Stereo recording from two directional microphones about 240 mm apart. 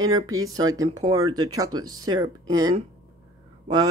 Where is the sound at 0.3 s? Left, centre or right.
Centre.